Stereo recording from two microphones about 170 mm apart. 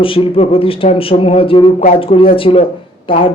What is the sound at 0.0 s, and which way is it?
A man's voice, 30° left (ahead or behind).